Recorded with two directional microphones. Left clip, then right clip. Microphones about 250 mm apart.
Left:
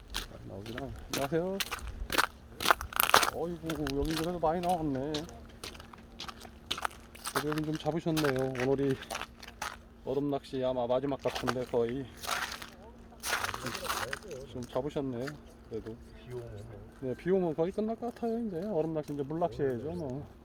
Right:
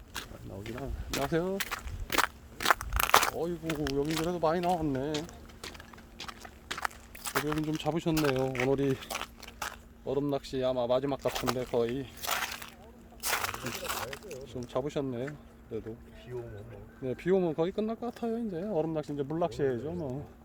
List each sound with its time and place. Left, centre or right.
0.1 s a sound: centre
1.3 s speech: right
1.5 s crunch: centre
3.2 s biting: centre
3.7 s speech: centre
6.1 s biting: centre
7.3 s speech: centre
8.1 s speech: centre
13.2 s a sound: centre
13.8 s a sound: centre
14.3 s speech: centre
17.1 s speech: centre